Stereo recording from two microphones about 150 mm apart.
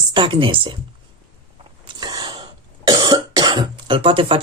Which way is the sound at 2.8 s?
25° right (ahead or behind).